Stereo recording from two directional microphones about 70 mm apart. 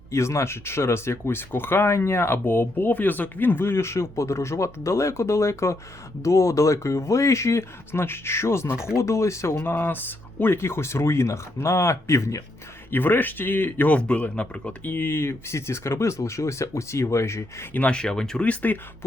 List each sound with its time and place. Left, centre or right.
0.1 s speech: left
12.9 s speech: left
13.9 s speech: centre
14.9 s speech: left
17.7 s speech: centre
18.4 s speech: left